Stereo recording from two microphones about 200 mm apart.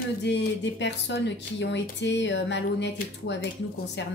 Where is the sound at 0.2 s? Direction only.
60° left (ahead or behind).